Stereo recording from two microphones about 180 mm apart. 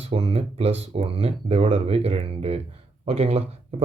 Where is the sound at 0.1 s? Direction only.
35° right (ahead or behind).